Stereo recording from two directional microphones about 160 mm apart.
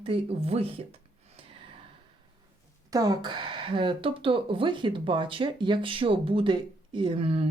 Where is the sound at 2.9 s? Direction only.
25° right (ahead or behind).